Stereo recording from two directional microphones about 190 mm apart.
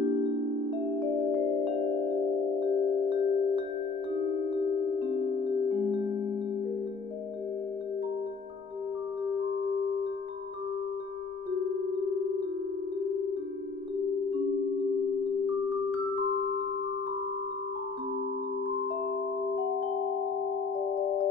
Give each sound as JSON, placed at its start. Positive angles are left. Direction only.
{"t": 2.6, "sound": "music", "side_deg": -25}